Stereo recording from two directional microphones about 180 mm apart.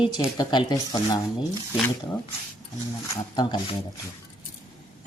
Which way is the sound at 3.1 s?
25° left (ahead or behind).